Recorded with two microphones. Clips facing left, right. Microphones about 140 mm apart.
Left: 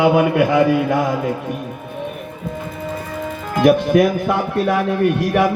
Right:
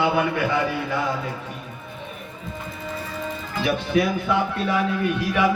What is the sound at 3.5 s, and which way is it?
Speech, 55° left (ahead or behind).